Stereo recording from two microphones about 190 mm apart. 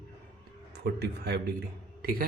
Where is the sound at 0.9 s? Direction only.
60° right (ahead or behind).